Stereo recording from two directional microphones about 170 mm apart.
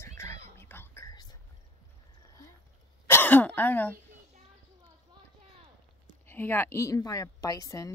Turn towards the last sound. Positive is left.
turn(degrees=20)  # may be behind; listen again after turning